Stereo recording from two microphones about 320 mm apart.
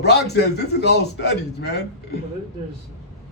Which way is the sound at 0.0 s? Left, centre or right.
Left.